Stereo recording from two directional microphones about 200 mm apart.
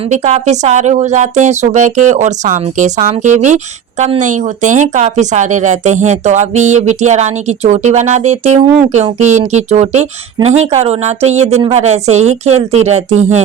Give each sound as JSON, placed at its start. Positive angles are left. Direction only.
{"t": 0.1, "sound": "speech", "side_deg": -35}